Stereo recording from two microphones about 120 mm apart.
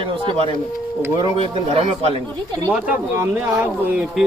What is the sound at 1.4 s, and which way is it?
Speech, 55° right (ahead or behind).